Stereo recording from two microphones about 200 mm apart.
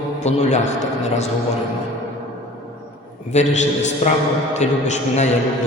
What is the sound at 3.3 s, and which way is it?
A man's voice, 35° left (ahead or behind).